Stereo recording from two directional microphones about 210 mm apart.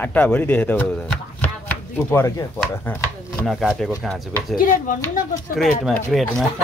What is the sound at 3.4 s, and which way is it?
Speech, centre (ahead or behind).